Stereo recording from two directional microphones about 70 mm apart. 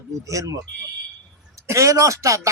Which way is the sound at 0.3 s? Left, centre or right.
Right.